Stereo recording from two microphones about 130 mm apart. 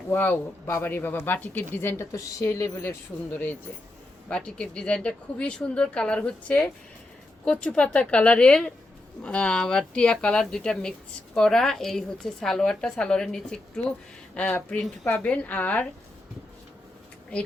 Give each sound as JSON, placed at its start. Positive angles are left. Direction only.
{"t": 0.1, "sound": "speech", "side_deg": 15}
{"t": 4.3, "sound": "speech", "side_deg": 10}